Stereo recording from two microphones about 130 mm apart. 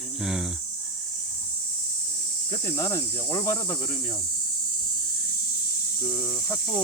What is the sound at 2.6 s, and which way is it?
Speech, 20° left (ahead or behind).